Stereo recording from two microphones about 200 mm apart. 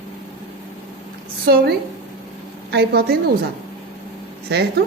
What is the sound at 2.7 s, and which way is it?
Speech, 50° right (ahead or behind).